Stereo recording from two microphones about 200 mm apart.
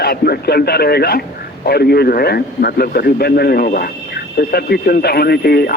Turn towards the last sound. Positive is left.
turn(degrees=50)  # may be behind; listen again after turning